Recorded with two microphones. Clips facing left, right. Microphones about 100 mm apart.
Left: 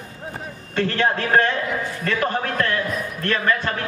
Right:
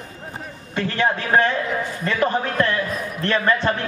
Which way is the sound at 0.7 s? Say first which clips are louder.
Left 1 dB; 15° right (ahead or behind).